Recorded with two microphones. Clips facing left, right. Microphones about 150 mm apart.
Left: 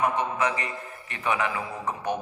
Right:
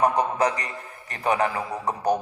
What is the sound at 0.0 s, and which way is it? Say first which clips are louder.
A man's voice: right 4 dB; 40° right (ahead or behind).